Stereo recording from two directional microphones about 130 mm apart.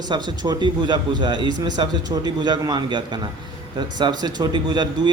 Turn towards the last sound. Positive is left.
turn(degrees=-35)  # may be behind; listen again after turning